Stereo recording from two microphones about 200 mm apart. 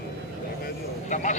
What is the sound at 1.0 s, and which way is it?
Speech, 40° left (ahead or behind).